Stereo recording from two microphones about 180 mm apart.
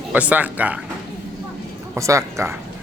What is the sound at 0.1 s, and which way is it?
Speech, 10° right (ahead or behind).